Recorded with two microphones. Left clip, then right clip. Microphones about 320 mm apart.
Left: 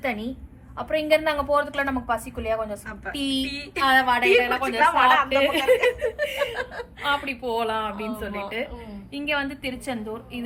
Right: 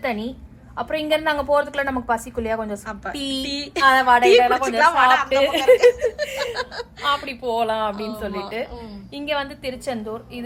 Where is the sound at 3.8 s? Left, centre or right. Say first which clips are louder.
Right 5 dB; right.